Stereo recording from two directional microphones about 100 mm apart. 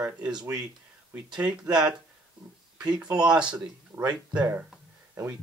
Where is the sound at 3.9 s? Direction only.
20° right (ahead or behind).